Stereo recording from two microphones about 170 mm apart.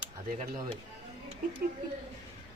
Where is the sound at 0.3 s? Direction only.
45° right (ahead or behind).